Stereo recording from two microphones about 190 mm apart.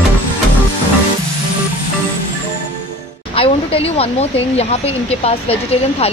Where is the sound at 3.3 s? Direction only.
30° left (ahead or behind).